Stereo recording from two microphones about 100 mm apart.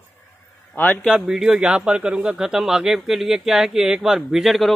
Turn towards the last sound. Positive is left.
turn(degrees=0)  # may be behind; listen again after turning